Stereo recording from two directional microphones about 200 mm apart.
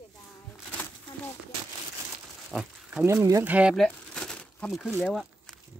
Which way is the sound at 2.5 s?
5° right (ahead or behind).